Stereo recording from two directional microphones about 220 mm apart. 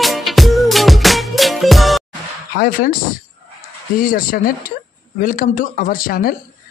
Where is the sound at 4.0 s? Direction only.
40° left (ahead or behind).